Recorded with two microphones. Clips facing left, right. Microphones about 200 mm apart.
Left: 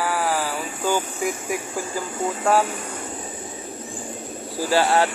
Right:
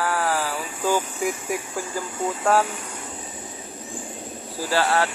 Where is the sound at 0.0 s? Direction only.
5° left (ahead or behind).